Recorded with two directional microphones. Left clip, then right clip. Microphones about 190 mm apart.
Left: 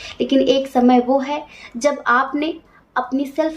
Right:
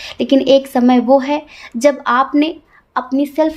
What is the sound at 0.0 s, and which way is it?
Speech, 50° right (ahead or behind).